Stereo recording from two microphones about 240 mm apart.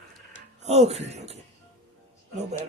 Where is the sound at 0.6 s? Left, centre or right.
Right.